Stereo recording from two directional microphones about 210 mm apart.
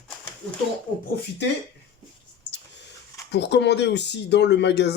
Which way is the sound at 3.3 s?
55° left (ahead or behind).